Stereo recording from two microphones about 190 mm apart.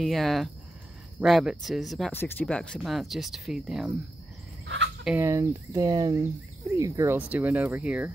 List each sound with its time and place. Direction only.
0.0 s speech: centre (ahead or behind)
4.6 s chicken: 70° right (ahead or behind)
5.0 s speech: 10° right (ahead or behind)